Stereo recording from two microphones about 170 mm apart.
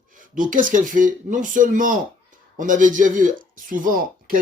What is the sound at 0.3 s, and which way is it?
Speech, 50° right (ahead or behind).